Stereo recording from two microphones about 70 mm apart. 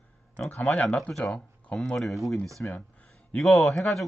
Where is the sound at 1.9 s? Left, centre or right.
Centre.